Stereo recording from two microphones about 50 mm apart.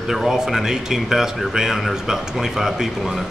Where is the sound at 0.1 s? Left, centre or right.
Centre.